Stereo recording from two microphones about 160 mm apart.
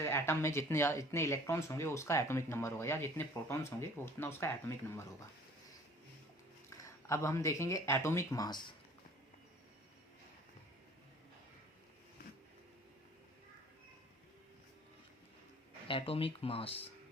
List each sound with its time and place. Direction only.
0.0 s speech: 15° left (ahead or behind)
6.7 s speech: 20° left (ahead or behind)
15.9 s speech: 35° left (ahead or behind)